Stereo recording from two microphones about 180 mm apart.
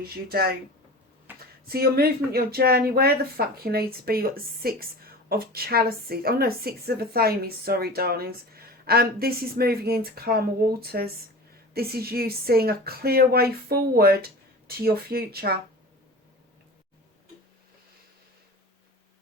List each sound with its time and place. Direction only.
0.0 s a woman's voice: 60° right (ahead or behind)
1.6 s a woman's voice: 60° right (ahead or behind)